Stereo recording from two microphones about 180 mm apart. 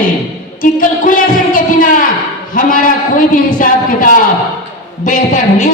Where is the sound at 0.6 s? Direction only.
50° left (ahead or behind).